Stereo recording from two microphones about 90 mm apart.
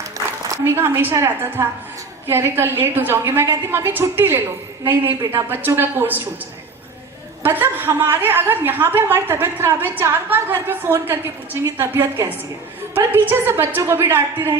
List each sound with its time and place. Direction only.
0.5 s a woman's voice: 25° right (ahead or behind)
5.5 s a woman's voice: 25° right (ahead or behind)
7.4 s a woman's voice: 25° right (ahead or behind)